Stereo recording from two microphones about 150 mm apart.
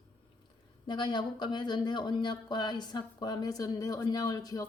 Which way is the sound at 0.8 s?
30° left (ahead or behind).